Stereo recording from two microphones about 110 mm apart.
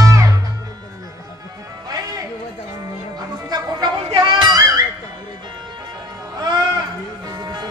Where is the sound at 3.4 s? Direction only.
40° right (ahead or behind).